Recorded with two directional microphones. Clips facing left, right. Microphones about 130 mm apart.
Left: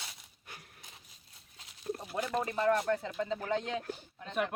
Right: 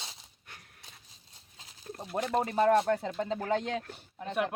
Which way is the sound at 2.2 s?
30° right (ahead or behind).